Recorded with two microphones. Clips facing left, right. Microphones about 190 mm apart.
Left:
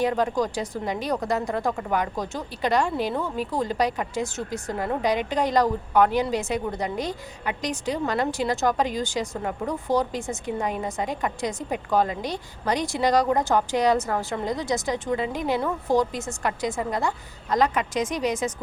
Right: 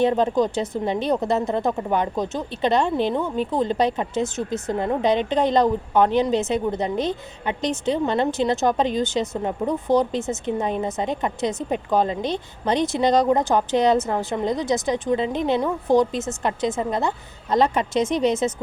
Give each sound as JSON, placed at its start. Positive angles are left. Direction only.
{"t": 0.0, "sound": "speech", "side_deg": -25}